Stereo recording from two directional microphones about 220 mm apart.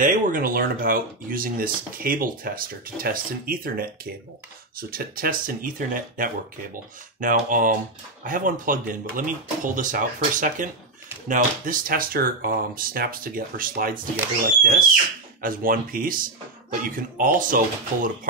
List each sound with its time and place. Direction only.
0.0 s speech: 40° right (ahead or behind)
15.4 s speech: 40° right (ahead or behind)